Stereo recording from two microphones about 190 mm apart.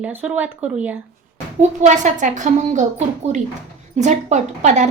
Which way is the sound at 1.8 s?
40° right (ahead or behind).